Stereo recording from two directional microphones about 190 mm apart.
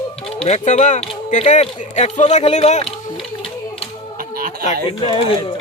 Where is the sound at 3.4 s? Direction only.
30° left (ahead or behind).